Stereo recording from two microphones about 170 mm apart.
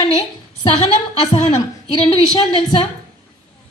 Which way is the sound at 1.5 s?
25° left (ahead or behind).